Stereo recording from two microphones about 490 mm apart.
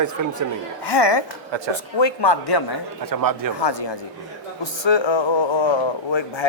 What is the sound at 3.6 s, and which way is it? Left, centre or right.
Speech, left.